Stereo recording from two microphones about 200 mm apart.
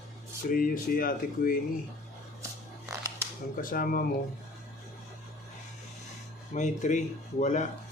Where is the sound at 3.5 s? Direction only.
45° left (ahead or behind).